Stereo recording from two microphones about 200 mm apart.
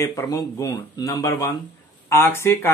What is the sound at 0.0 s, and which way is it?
Speech, 15° left (ahead or behind).